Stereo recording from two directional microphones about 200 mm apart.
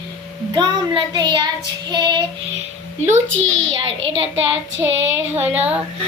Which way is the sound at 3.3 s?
75° right (ahead or behind).